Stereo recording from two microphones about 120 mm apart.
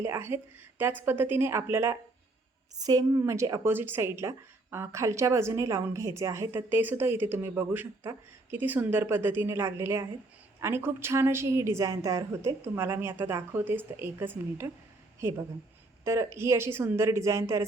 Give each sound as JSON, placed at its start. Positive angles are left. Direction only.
{"t": 0.0, "sound": "a woman's voice", "side_deg": -20}
{"t": 2.7, "sound": "a woman's voice", "side_deg": -30}